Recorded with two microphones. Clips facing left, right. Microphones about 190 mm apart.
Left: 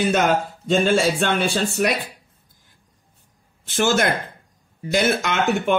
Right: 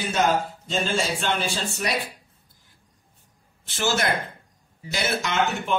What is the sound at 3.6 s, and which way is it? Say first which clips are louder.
Speech: left 5 dB; 50° left (ahead or behind).